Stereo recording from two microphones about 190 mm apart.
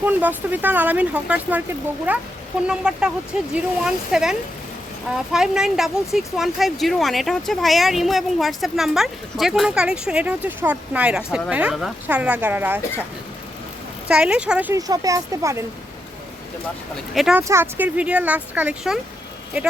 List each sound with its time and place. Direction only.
0.0 s speech: 10° right (ahead or behind)
14.1 s speech: 5° right (ahead or behind)
14.7 s speech: 20° right (ahead or behind)
17.2 s speech: 5° right (ahead or behind)